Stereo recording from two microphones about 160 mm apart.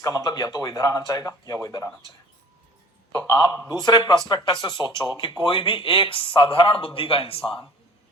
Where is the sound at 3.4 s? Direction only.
20° left (ahead or behind).